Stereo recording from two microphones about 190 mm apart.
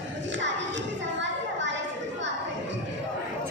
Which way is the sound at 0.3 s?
75° right (ahead or behind).